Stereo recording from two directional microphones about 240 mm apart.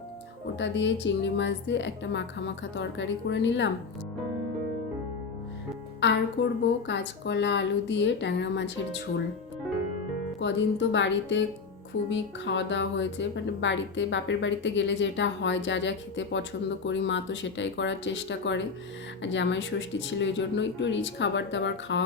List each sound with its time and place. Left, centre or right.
0.6 s speech: left
6.0 s a woman's voice: left
10.4 s speech: left